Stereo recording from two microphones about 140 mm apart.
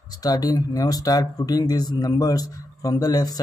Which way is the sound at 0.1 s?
25° left (ahead or behind).